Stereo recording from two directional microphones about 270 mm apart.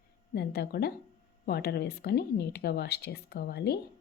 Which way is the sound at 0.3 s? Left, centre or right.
Left.